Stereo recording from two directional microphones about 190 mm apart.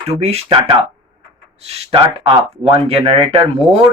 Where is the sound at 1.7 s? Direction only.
30° right (ahead or behind).